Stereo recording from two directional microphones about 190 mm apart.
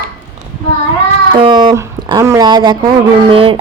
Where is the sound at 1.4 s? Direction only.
25° right (ahead or behind).